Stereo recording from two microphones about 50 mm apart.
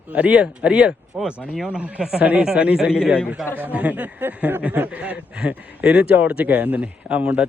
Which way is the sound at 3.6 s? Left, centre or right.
Right.